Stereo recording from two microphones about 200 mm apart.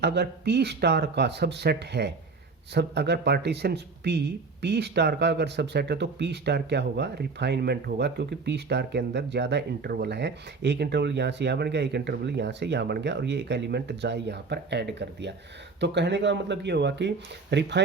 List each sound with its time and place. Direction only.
0.0 s speech: 55° right (ahead or behind)